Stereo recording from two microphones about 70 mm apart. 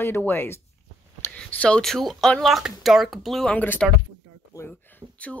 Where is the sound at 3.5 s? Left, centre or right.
Left.